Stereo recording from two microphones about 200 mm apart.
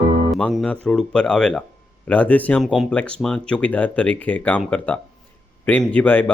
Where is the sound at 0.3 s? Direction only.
Centre (ahead or behind).